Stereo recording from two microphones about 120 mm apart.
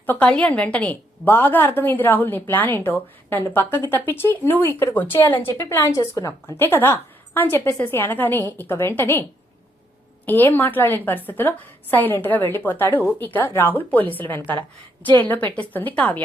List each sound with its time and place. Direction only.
0.0 s a woman's voice: 10° left (ahead or behind)
10.2 s a woman's voice: 15° left (ahead or behind)